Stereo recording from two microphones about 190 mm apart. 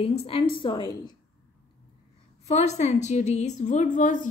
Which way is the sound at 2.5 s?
35° left (ahead or behind).